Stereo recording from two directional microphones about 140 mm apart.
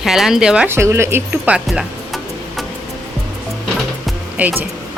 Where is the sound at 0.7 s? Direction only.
20° right (ahead or behind).